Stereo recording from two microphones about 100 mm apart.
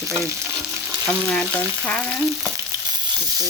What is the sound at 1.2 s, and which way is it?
Speech, 15° left (ahead or behind).